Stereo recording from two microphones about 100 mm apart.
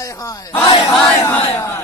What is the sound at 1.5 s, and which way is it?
Speech, 25° left (ahead or behind).